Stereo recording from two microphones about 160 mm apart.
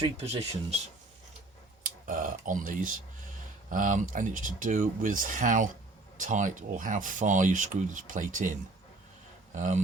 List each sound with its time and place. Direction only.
0.0 s speech: 40° right (ahead or behind)
1.8 s speech: 55° right (ahead or behind)
9.6 s speech: 50° right (ahead or behind)